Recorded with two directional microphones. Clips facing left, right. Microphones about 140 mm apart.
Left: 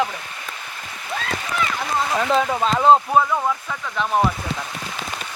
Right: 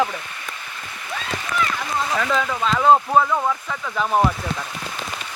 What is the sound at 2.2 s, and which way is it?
Speech, 30° left (ahead or behind).